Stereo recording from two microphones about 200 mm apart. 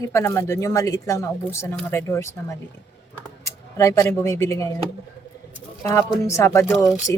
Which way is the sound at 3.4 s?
15° left (ahead or behind).